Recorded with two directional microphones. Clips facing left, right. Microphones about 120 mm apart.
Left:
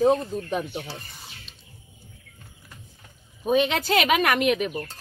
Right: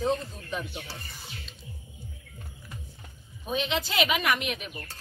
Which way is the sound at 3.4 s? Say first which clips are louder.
Left 8 dB; 55° left (ahead or behind).